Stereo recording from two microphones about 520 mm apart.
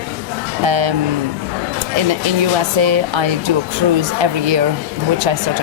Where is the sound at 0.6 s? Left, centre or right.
Right.